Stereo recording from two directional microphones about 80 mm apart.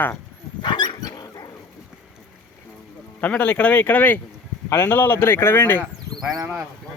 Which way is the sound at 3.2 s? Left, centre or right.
Centre.